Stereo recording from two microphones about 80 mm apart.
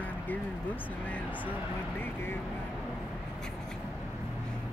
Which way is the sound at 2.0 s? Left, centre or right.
Left.